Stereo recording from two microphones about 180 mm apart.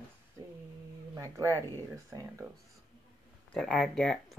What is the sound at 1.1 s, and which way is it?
Speech, 15° right (ahead or behind).